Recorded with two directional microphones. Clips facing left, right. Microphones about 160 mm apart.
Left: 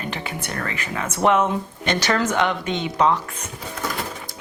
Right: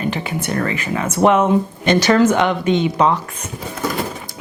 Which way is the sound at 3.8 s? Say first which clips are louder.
Right 6 dB; 10° right (ahead or behind).